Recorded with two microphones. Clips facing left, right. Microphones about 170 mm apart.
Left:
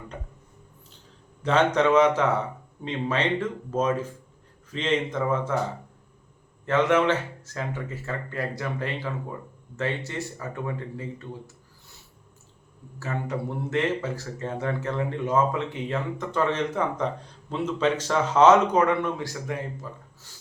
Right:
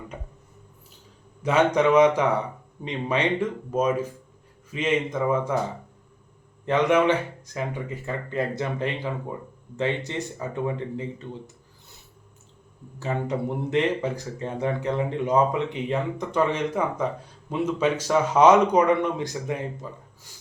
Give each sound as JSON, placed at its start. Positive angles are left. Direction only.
{"t": 1.4, "sound": "speech", "side_deg": -10}
{"t": 6.7, "sound": "speech", "side_deg": -15}
{"t": 13.0, "sound": "speech", "side_deg": -20}